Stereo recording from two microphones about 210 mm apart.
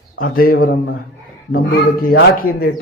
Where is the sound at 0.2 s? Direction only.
45° left (ahead or behind).